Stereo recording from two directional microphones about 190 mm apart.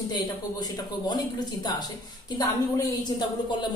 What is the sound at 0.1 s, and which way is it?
Speech, 20° left (ahead or behind).